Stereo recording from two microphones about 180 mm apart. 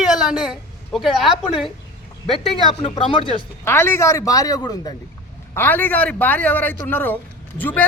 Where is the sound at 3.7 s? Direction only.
15° left (ahead or behind).